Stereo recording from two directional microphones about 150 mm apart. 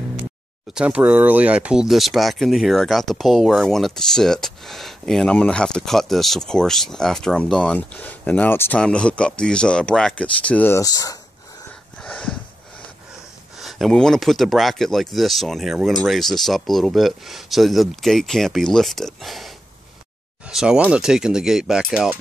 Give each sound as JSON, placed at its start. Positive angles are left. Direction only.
{"t": 0.7, "sound": "speech", "side_deg": -10}
{"t": 10.8, "sound": "speech", "side_deg": 25}
{"t": 12.0, "sound": "a sound", "side_deg": 5}
{"t": 13.6, "sound": "speech", "side_deg": 0}